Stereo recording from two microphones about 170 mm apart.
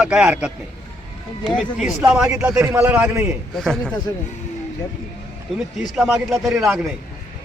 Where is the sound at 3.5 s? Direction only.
Centre (ahead or behind).